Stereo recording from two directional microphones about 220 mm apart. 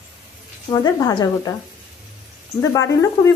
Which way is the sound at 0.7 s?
15° left (ahead or behind).